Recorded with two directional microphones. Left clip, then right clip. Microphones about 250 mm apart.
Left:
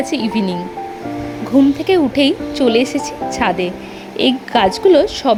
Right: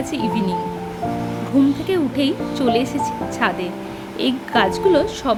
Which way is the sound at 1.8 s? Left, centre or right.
Left.